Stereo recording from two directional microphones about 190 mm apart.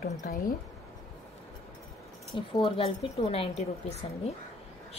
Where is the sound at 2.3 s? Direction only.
30° left (ahead or behind).